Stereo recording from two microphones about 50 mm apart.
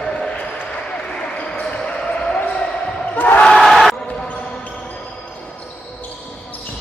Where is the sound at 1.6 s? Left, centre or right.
Left.